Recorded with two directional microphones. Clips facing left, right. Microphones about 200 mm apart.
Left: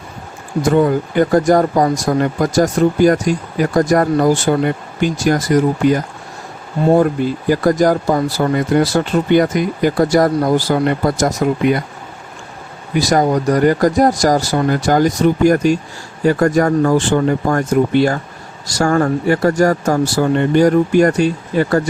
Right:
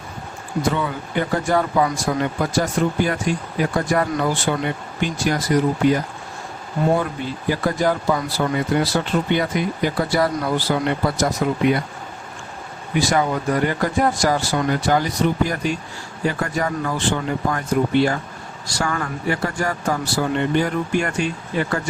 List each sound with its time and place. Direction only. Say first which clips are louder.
0.6 s speech: left 10 dB; 45° left (ahead or behind)
7.5 s speech: left 7 dB; 40° left (ahead or behind)
13.0 s speech: left 6 dB; 40° left (ahead or behind)